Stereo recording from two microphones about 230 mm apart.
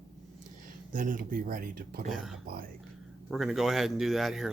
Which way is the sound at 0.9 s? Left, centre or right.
Right.